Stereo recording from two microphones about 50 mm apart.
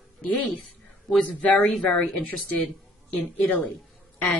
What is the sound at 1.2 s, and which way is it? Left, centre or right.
Speech, left.